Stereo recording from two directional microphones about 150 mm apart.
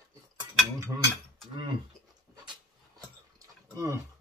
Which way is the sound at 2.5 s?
25° right (ahead or behind).